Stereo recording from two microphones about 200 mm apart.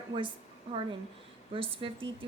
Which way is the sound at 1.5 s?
25° right (ahead or behind).